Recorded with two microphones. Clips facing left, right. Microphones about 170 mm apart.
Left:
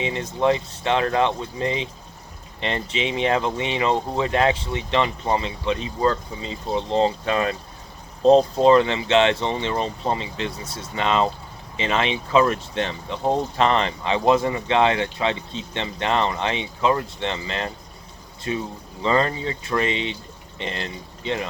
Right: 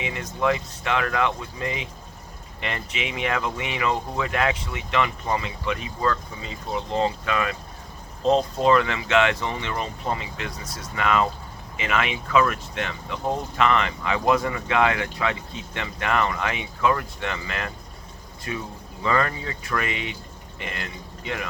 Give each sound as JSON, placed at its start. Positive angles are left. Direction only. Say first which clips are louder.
{"t": 0.0, "sound": "a man's voice", "louder": "left 4 dB", "side_deg": 30}